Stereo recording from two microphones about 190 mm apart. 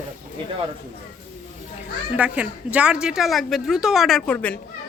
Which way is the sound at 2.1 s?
5° right (ahead or behind).